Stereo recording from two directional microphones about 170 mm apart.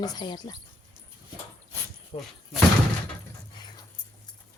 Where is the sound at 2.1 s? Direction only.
40° left (ahead or behind).